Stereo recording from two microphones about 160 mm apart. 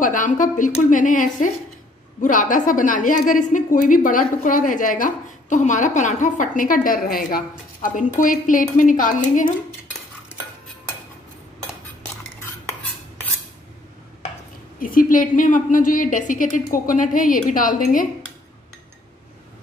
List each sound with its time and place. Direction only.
0.0 s a woman's voice: 55° left (ahead or behind)
14.8 s a woman's voice: 60° left (ahead or behind)